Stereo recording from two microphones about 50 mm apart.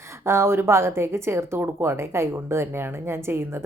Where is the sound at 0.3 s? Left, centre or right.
Right.